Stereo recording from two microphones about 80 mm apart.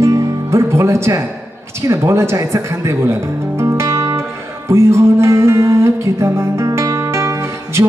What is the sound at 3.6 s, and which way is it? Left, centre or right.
Music, right.